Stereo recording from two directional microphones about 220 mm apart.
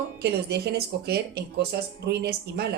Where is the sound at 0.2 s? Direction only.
50° right (ahead or behind).